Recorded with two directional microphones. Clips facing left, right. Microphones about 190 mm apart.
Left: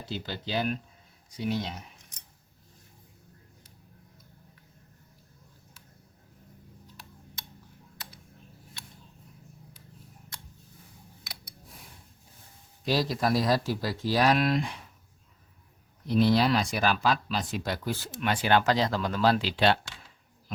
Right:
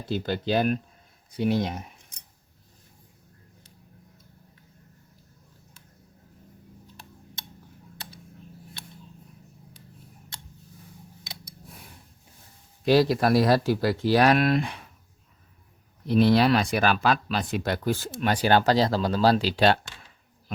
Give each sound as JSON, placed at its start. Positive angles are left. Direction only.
{"t": 0.1, "sound": "speech", "side_deg": -50}
{"t": 12.8, "sound": "speech", "side_deg": -60}
{"t": 16.0, "sound": "speech", "side_deg": -60}